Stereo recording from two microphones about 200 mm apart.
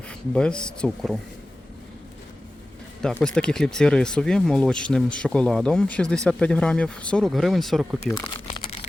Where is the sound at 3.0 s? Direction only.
5° left (ahead or behind).